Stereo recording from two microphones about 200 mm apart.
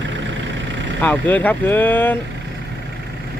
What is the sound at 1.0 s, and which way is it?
Speech, 10° left (ahead or behind).